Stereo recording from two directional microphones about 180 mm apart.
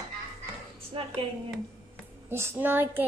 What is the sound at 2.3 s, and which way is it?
Speech, 10° right (ahead or behind).